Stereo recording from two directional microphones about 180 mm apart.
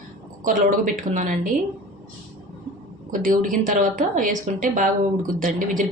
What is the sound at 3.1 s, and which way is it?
A woman's voice, 50° right (ahead or behind).